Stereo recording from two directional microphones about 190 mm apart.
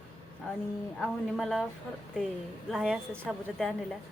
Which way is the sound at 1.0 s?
Centre (ahead or behind).